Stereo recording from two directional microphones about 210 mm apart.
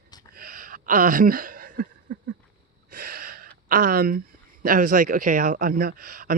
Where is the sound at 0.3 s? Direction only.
45° right (ahead or behind).